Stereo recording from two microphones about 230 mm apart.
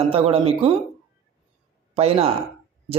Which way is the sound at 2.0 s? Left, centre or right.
Right.